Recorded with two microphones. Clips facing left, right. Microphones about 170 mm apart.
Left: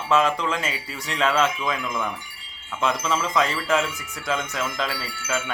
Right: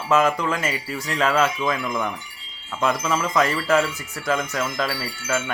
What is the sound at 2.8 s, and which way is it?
Wind chime, centre (ahead or behind).